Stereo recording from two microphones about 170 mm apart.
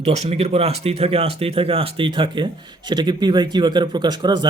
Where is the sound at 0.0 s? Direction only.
40° right (ahead or behind).